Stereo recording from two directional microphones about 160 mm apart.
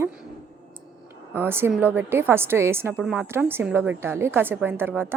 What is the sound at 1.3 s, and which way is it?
A woman's voice, 15° right (ahead or behind).